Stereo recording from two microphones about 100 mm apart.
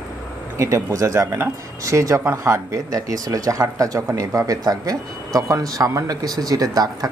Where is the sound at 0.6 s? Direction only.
30° right (ahead or behind).